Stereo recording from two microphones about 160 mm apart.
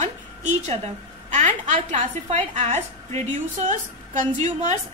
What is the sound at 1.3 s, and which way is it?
A woman's voice, 45° right (ahead or behind).